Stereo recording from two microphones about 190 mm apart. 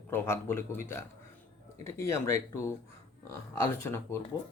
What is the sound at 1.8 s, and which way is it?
Speech, 15° left (ahead or behind).